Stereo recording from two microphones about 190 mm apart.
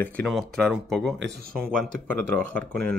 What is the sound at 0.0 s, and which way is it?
Speech, 5° left (ahead or behind).